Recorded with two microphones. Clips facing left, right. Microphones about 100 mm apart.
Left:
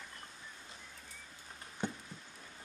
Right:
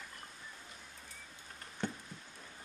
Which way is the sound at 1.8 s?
15° left (ahead or behind).